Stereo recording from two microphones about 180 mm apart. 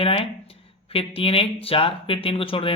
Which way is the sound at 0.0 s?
30° left (ahead or behind).